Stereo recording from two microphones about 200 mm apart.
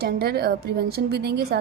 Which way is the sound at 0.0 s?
50° right (ahead or behind).